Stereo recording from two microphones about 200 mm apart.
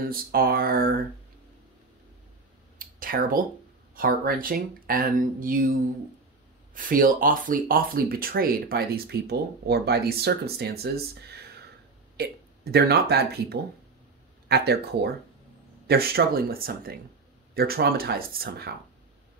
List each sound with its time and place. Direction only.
0.0 s speech: 50° right (ahead or behind)
2.8 s a sound: 45° right (ahead or behind)
3.9 s speech: 45° right (ahead or behind)